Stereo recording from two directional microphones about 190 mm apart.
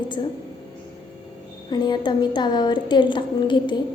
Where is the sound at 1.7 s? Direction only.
25° left (ahead or behind).